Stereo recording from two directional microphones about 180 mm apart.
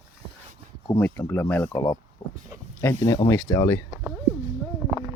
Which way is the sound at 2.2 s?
25° left (ahead or behind).